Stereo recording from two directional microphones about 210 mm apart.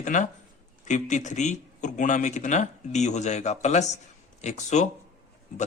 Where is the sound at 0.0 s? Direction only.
35° left (ahead or behind).